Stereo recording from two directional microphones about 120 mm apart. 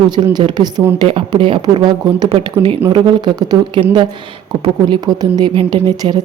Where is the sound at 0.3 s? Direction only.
35° right (ahead or behind).